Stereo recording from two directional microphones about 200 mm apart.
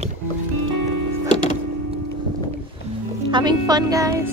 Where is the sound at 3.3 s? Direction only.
20° right (ahead or behind).